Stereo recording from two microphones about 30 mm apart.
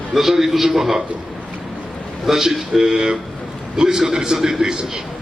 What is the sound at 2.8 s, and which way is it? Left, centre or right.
A man's voice, centre.